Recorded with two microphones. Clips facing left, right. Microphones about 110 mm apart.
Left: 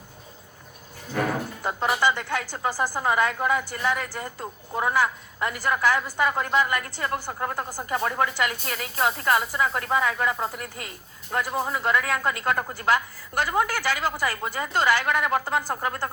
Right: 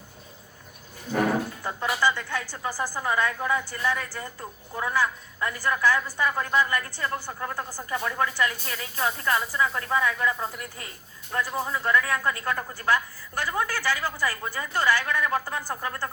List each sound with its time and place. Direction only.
1.6 s a woman's voice: 20° left (ahead or behind)